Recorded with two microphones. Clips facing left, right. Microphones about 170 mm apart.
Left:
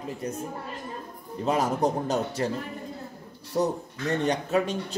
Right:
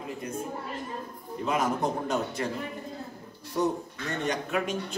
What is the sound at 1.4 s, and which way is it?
A man's voice, 35° left (ahead or behind).